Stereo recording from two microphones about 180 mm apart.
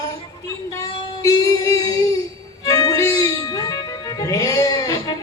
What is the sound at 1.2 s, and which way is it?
Speech, 20° left (ahead or behind).